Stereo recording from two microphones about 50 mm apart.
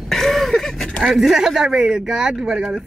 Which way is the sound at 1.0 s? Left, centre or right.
Centre.